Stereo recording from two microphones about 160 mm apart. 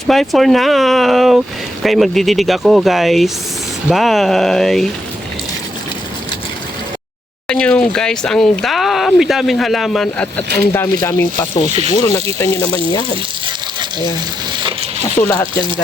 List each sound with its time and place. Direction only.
0.1 s speech: centre (ahead or behind)
7.4 s speech: 5° left (ahead or behind)
12.6 s speech: 30° left (ahead or behind)
14.6 s a sound: 35° right (ahead or behind)
15.2 s speech: 15° left (ahead or behind)